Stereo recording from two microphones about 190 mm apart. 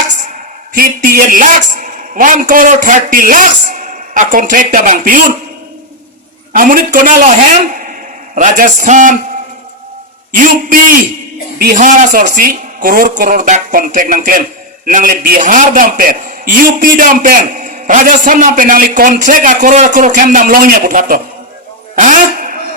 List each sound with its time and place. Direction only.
0.7 s speech: 50° right (ahead or behind)
6.5 s a man's voice: 45° right (ahead or behind)
8.4 s a man's voice: 40° right (ahead or behind)
10.3 s a man's voice: 45° right (ahead or behind)
21.9 s a sound: 40° right (ahead or behind)